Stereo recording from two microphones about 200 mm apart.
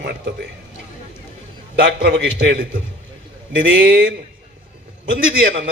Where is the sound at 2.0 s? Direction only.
55° right (ahead or behind).